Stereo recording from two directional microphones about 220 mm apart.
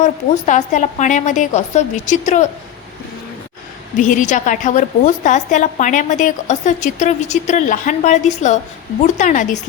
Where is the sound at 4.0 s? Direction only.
35° left (ahead or behind).